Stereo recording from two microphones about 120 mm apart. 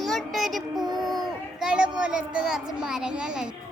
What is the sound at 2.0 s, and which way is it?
A child's voice, 5° right (ahead or behind).